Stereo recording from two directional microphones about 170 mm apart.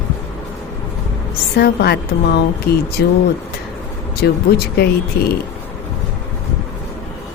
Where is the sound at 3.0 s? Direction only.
65° left (ahead or behind).